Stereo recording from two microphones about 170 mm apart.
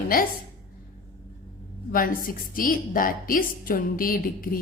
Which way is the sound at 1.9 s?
55° left (ahead or behind).